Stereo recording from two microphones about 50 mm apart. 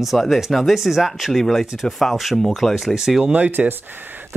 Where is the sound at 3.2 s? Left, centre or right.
Right.